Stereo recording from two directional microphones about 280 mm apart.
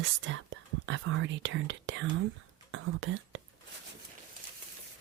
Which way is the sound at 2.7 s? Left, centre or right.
Right.